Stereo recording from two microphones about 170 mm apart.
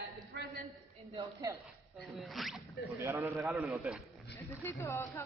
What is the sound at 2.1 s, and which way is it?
Speech, centre (ahead or behind).